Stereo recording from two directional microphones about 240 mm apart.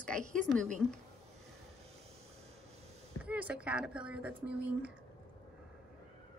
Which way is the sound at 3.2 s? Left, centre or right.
Centre.